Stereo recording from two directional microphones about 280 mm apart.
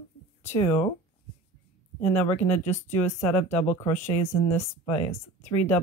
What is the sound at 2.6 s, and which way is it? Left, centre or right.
Speech, left.